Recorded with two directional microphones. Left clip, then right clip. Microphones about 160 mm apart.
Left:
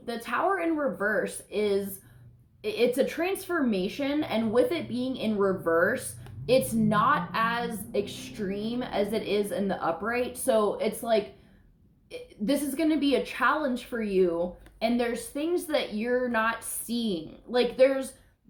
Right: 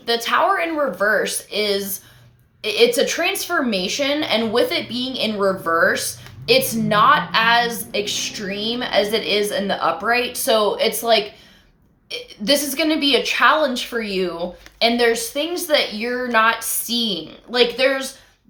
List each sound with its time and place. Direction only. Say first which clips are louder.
0.0 s a woman's voice: right 11 dB; 15° right (ahead or behind)